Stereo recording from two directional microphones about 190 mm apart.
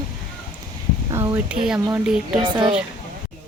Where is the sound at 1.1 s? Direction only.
20° right (ahead or behind).